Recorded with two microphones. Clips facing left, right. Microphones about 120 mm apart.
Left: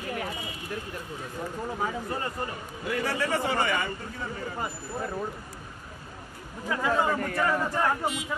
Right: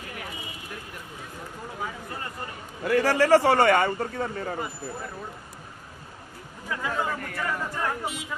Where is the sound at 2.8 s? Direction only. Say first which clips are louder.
Right 8 dB; 75° right (ahead or behind).